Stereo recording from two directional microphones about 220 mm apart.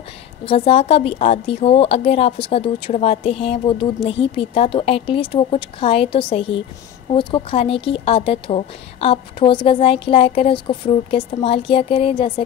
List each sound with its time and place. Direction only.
0.5 s a woman's voice: 25° left (ahead or behind)